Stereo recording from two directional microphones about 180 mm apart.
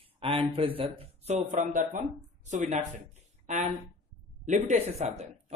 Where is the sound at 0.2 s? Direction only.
30° right (ahead or behind).